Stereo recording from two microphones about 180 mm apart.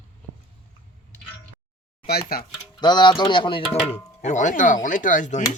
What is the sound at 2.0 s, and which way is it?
Speech, 60° left (ahead or behind).